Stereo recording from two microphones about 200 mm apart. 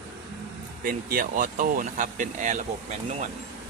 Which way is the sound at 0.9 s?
45° right (ahead or behind).